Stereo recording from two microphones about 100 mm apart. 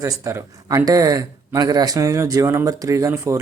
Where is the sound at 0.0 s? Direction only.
30° right (ahead or behind).